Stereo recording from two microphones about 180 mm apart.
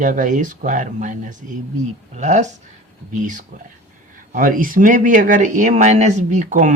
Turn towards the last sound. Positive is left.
turn(degrees=-45)  # may be behind; listen again after turning